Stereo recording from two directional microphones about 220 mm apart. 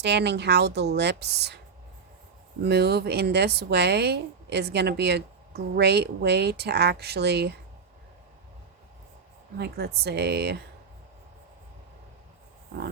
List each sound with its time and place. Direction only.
0.0 s speech: 50° right (ahead or behind)
2.6 s speech: 50° right (ahead or behind)
9.6 s speech: 45° right (ahead or behind)